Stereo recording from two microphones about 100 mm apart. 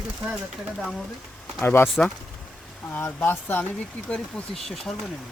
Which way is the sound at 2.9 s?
20° left (ahead or behind).